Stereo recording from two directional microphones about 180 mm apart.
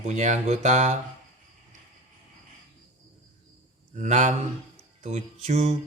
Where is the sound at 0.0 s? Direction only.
40° right (ahead or behind).